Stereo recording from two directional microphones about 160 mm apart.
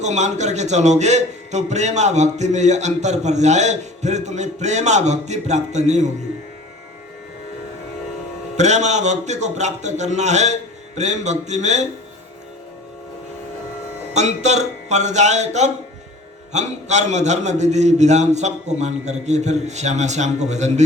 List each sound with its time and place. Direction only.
0.0 s a man's voice: 45° right (ahead or behind)
8.5 s a man's voice: 45° right (ahead or behind)
14.1 s a man's voice: 45° right (ahead or behind)